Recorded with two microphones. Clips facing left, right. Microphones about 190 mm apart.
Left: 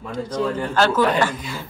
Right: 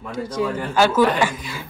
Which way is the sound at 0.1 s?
10° right (ahead or behind).